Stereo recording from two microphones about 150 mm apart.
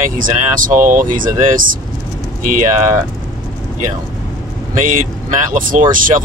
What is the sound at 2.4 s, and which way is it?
Speech, 60° right (ahead or behind).